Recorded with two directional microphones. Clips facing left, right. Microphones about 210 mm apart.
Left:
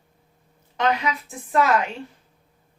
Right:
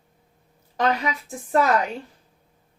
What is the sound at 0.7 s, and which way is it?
Speech, 40° right (ahead or behind).